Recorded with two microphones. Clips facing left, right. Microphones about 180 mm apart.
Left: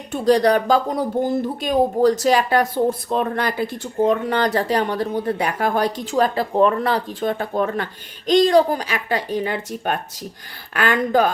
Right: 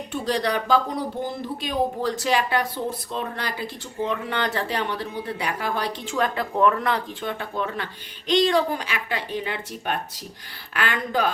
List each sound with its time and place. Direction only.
0.1 s speech: 45° left (ahead or behind)